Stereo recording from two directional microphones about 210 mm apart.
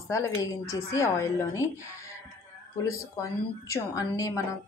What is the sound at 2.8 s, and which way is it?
A woman's voice, 15° left (ahead or behind).